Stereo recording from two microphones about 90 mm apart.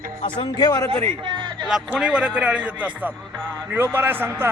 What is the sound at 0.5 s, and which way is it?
Speech, 50° left (ahead or behind).